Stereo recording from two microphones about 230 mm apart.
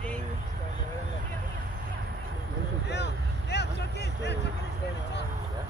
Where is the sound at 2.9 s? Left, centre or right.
Left.